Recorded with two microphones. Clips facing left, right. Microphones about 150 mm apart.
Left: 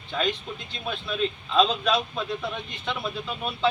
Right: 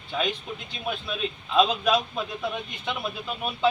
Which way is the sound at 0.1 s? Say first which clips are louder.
Left 1 dB; 10° right (ahead or behind).